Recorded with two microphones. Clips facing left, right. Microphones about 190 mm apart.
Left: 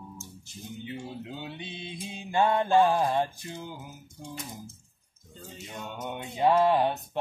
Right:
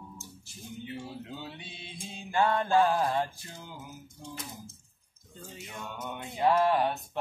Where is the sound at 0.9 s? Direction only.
20° left (ahead or behind).